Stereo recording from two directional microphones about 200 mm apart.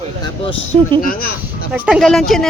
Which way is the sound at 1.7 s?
5° right (ahead or behind).